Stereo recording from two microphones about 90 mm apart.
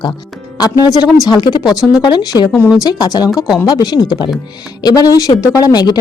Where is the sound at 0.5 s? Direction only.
50° left (ahead or behind).